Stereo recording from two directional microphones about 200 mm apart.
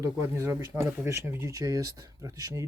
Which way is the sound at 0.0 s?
15° right (ahead or behind).